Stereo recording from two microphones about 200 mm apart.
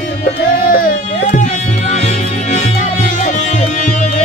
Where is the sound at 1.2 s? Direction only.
35° left (ahead or behind).